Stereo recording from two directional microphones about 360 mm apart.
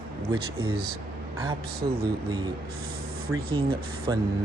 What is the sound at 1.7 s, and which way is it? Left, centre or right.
Speech, right.